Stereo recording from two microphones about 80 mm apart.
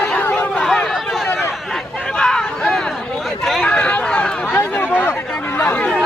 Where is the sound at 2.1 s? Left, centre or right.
Centre.